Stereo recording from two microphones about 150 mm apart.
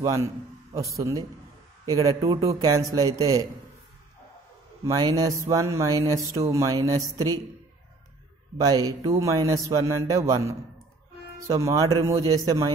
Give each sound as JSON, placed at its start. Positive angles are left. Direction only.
{"t": 0.0, "sound": "speech", "side_deg": -20}
{"t": 4.8, "sound": "speech", "side_deg": -25}
{"t": 8.5, "sound": "speech", "side_deg": -25}